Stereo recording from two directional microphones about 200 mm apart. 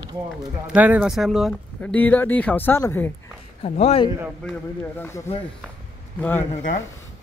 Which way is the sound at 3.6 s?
30° left (ahead or behind).